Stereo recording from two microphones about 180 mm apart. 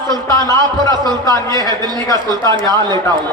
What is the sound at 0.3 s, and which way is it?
A man's voice, 15° left (ahead or behind).